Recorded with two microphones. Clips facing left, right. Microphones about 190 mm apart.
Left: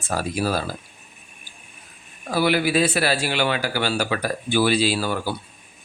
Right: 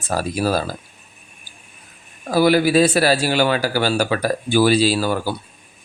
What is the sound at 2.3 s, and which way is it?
Speech, 40° right (ahead or behind).